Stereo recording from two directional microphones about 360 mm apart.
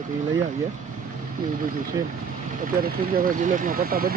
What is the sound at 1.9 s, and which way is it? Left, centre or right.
Speech, centre.